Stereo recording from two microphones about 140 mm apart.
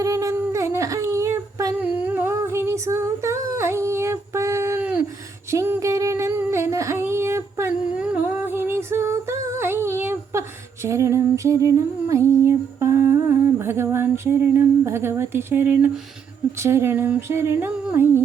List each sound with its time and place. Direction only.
0.0 s humming: 20° right (ahead or behind)
5.5 s a sound: 20° right (ahead or behind)
7.9 s humming: 10° right (ahead or behind)
16.6 s speech: 20° right (ahead or behind)
17.8 s music: 15° right (ahead or behind)